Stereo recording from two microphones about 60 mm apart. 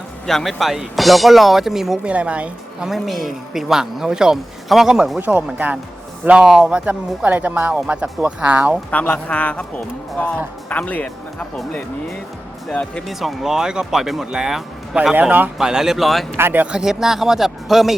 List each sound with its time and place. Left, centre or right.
0.3 s speech: centre
2.0 s speech: right
2.9 s speech: centre
5.2 s speech: right
8.9 s speech: left
12.7 s speech: centre
13.1 s speech: centre
15.1 s speech: right
15.5 s speech: centre
16.4 s speech: right
16.7 s speech: centre